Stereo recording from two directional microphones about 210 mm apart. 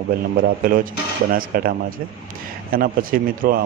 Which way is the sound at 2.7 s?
45° right (ahead or behind).